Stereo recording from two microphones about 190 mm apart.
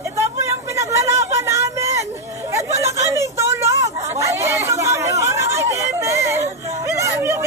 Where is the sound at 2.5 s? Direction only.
15° right (ahead or behind).